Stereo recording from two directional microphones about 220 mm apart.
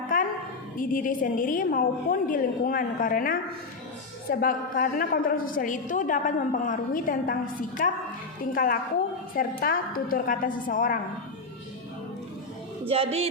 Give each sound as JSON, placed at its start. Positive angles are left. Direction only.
{"t": 0.1, "sound": "a sound", "side_deg": 40}
{"t": 0.8, "sound": "a woman's voice", "side_deg": 40}
{"t": 8.4, "sound": "a woman's voice", "side_deg": 40}
{"t": 12.9, "sound": "music", "side_deg": -25}